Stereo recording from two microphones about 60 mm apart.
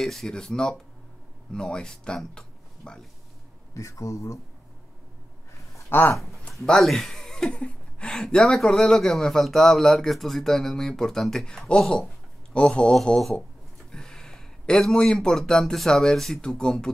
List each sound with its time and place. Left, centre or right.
0.0 s a man's voice: centre
3.7 s speech: left
5.9 s speech: left
6.4 s a man's voice: centre